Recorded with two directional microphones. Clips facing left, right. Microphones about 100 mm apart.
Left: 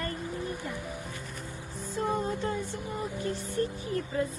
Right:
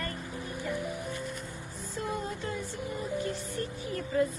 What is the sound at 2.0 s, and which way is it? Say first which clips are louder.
Music: left 5 dB; 40° left (ahead or behind).